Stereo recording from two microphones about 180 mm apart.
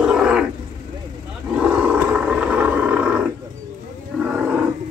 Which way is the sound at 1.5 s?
5° right (ahead or behind).